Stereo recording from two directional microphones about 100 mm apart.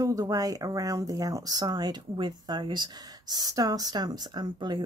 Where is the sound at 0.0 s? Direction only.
35° right (ahead or behind).